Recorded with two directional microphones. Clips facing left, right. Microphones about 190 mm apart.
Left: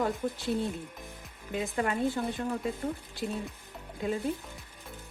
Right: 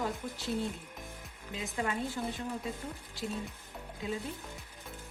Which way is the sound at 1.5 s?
55° left (ahead or behind).